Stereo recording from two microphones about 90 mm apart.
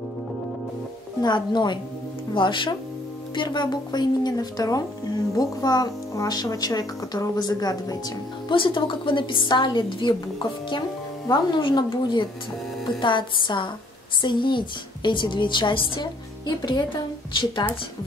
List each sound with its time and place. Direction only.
1.2 s a woman's voice: 55° left (ahead or behind)
8.5 s a woman's voice: 65° left (ahead or behind)
17.3 s a woman's voice: 65° left (ahead or behind)